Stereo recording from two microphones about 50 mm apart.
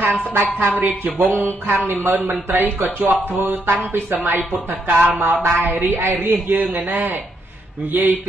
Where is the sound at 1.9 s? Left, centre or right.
Right.